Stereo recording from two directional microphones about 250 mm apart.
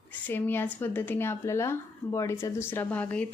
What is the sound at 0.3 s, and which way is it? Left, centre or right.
Speech, centre.